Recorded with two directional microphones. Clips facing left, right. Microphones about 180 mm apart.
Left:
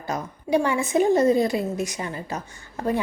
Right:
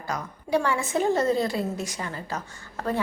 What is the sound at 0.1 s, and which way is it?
A woman's voice, 20° left (ahead or behind).